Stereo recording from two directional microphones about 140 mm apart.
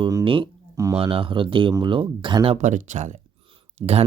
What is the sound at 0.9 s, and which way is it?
Speech, 40° right (ahead or behind).